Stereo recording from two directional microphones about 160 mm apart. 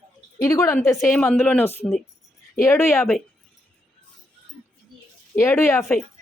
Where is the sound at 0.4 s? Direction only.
20° left (ahead or behind).